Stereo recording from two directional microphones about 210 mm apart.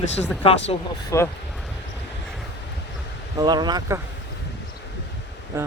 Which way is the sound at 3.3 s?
20° right (ahead or behind).